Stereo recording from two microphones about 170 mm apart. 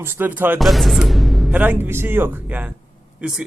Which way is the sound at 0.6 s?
Centre (ahead or behind).